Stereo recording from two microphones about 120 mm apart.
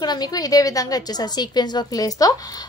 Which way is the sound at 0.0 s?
35° left (ahead or behind).